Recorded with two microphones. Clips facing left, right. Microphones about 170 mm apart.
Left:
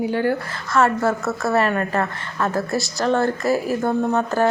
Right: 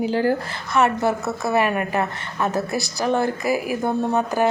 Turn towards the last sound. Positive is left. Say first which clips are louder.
# left 1 dB
turn(degrees=-15)  # may be behind; listen again after turning